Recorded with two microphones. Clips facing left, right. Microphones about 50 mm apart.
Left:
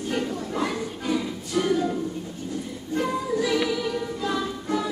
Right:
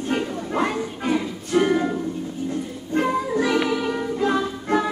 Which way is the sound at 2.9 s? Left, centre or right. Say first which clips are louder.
Right 4 dB; right.